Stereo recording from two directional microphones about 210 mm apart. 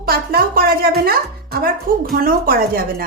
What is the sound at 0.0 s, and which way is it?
Speech, 45° right (ahead or behind).